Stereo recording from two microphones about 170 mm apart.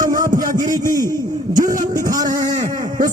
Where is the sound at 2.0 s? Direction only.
20° right (ahead or behind).